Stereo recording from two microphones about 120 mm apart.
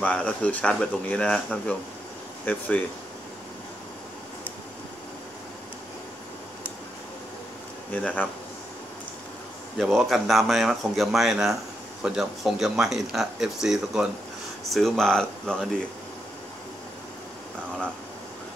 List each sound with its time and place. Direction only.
0.0 s speech: 10° left (ahead or behind)
7.9 s speech: 10° left (ahead or behind)
9.8 s speech: centre (ahead or behind)